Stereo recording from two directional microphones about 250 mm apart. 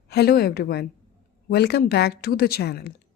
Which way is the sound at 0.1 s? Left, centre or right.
Left.